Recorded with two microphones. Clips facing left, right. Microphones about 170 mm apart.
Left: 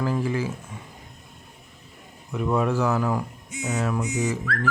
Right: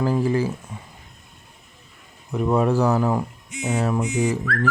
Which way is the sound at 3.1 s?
20° right (ahead or behind).